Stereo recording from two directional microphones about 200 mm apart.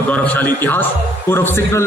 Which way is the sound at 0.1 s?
5° left (ahead or behind).